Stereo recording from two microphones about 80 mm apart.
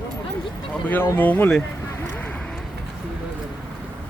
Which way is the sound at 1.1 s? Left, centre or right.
Left.